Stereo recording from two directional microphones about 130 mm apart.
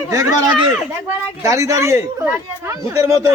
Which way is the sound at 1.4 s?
25° right (ahead or behind).